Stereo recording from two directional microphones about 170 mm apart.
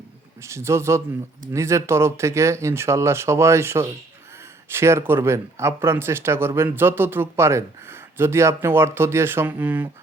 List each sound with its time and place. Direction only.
0.4 s speech: 15° right (ahead or behind)